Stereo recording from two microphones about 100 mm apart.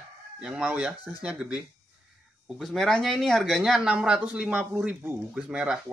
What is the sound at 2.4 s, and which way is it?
Speech, centre (ahead or behind).